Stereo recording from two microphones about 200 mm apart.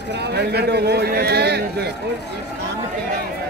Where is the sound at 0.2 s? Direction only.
55° right (ahead or behind).